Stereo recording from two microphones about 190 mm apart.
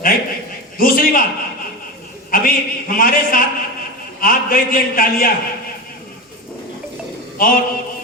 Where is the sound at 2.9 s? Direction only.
50° left (ahead or behind).